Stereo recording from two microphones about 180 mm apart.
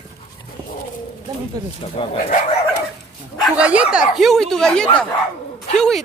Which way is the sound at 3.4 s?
5° right (ahead or behind).